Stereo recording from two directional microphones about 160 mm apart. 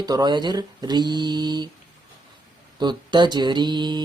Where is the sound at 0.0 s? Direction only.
25° right (ahead or behind).